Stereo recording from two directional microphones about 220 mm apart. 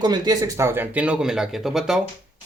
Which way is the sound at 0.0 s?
20° right (ahead or behind).